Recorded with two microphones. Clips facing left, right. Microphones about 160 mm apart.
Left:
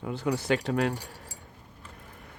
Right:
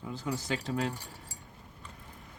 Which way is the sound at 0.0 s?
65° left (ahead or behind).